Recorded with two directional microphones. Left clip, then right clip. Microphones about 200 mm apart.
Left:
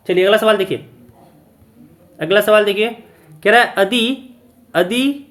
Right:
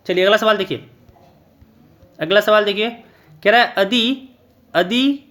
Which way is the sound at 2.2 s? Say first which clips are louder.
Left 2 dB; 25° right (ahead or behind).